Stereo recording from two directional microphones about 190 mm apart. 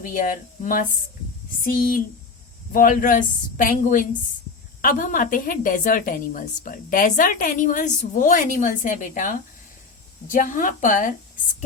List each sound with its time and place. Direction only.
0.0 s a woman's voice: 45° left (ahead or behind)